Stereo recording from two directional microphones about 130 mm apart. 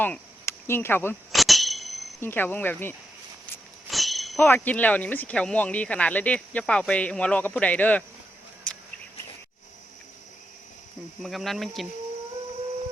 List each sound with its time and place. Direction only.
0.0 s speech: 15° left (ahead or behind)
1.3 s a sound: centre (ahead or behind)
2.2 s speech: 15° left (ahead or behind)
3.8 s a sound: centre (ahead or behind)
4.4 s speech: 15° left (ahead or behind)
8.7 s insect: 10° left (ahead or behind)
11.2 s speech: centre (ahead or behind)